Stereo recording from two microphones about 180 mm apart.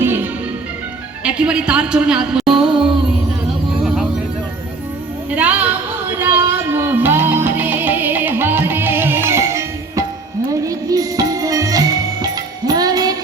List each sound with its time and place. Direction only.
0.0 s music: 10° right (ahead or behind)
1.2 s a man's voice: 5° right (ahead or behind)
3.8 s a sound: 5° right (ahead or behind)
5.3 s music: 10° right (ahead or behind)